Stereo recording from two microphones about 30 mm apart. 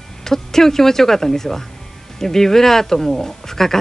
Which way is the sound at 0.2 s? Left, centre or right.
Centre.